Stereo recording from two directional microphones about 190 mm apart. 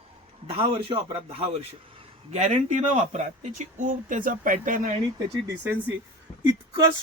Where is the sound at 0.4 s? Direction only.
30° right (ahead or behind); by 4.9 s 45° right (ahead or behind).